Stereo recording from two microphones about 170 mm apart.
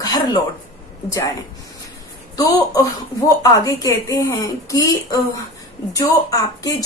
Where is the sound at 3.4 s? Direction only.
20° left (ahead or behind).